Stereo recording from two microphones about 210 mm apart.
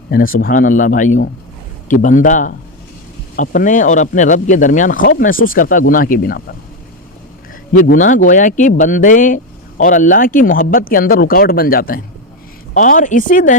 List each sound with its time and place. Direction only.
0.3 s speech: 40° left (ahead or behind)
7.7 s speech: 40° left (ahead or behind)